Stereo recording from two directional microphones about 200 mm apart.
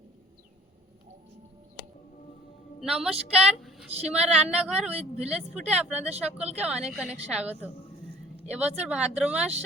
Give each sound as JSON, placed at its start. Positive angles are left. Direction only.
{"t": 2.8, "sound": "a woman's voice", "side_deg": 0}
{"t": 4.9, "sound": "speech", "side_deg": -30}
{"t": 5.7, "sound": "a woman's voice", "side_deg": -5}